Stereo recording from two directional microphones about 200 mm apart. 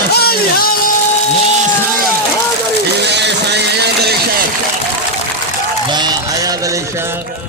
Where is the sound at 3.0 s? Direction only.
60° right (ahead or behind).